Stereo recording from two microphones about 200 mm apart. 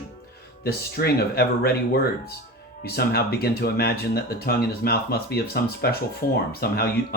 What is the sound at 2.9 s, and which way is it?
Speech, 50° left (ahead or behind).